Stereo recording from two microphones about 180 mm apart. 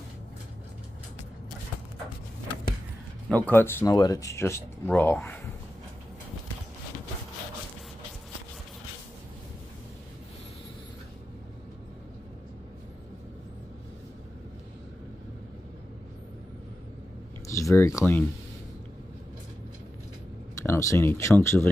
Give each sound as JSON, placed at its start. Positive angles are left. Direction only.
{"t": 3.3, "sound": "speech", "side_deg": 10}
{"t": 17.5, "sound": "speech", "side_deg": 15}
{"t": 20.6, "sound": "speech", "side_deg": 15}